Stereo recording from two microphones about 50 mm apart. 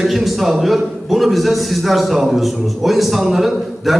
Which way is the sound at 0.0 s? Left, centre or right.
Centre.